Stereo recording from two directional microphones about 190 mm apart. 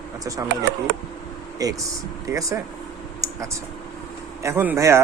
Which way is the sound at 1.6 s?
20° right (ahead or behind).